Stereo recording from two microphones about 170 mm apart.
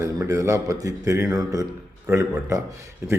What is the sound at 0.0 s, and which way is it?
A man's voice, 20° right (ahead or behind).